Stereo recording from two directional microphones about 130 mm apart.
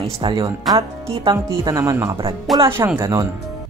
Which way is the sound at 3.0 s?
20° right (ahead or behind).